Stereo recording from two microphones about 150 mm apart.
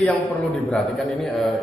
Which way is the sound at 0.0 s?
5° left (ahead or behind).